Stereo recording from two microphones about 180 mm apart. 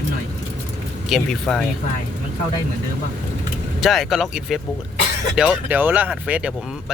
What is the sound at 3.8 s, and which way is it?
Speech, centre (ahead or behind).